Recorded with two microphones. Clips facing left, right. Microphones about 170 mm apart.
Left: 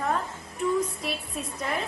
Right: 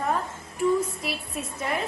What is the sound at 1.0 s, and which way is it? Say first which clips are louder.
Speech: even; 5° right (ahead or behind).